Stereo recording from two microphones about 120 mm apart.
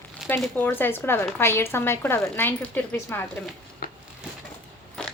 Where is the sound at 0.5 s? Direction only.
15° left (ahead or behind).